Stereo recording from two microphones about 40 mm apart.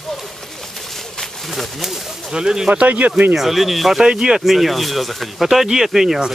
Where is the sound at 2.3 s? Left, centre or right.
Centre.